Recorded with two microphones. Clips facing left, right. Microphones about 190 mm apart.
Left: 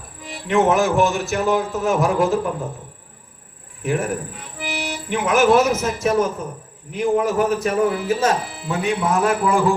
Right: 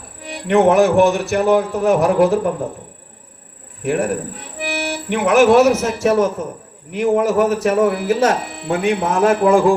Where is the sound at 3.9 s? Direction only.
65° right (ahead or behind).